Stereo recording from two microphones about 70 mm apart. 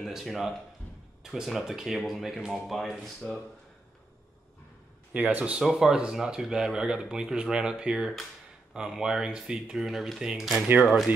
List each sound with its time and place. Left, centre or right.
0.0 s speech: centre
5.1 s speech: right; by 11.1 s centre